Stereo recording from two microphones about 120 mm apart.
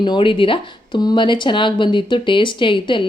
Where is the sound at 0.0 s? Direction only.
40° left (ahead or behind).